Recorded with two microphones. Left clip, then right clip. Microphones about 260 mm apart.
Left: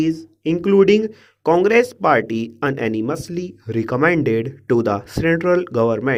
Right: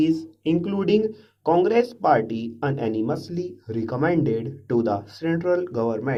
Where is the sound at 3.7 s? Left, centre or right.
Left.